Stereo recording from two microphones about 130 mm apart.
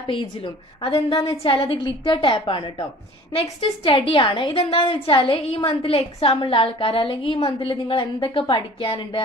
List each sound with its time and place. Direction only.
0.0 s a woman's voice: 40° left (ahead or behind)